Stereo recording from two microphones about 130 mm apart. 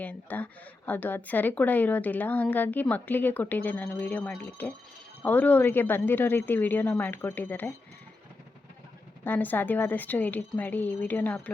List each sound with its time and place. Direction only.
0.0 s a woman's voice: 15° left (ahead or behind)
9.2 s a woman's voice: 15° left (ahead or behind)